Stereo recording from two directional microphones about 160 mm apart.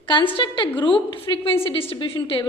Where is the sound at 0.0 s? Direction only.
30° left (ahead or behind).